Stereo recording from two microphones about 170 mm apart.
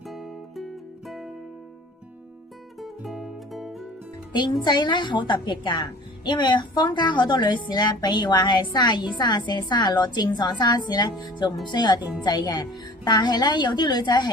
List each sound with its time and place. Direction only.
0.1 s music: centre (ahead or behind)
2.8 s music: centre (ahead or behind)
4.3 s a woman's voice: 25° left (ahead or behind)